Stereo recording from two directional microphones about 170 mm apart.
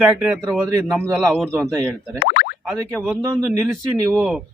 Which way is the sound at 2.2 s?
60° left (ahead or behind).